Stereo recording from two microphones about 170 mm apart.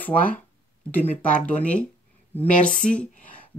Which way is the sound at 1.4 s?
10° left (ahead or behind).